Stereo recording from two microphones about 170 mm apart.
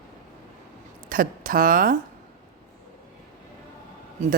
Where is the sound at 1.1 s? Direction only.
55° right (ahead or behind).